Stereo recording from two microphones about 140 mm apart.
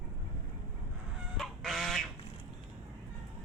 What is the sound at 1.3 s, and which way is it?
Goose, centre (ahead or behind).